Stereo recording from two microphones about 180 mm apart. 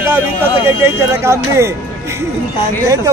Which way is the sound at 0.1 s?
15° right (ahead or behind).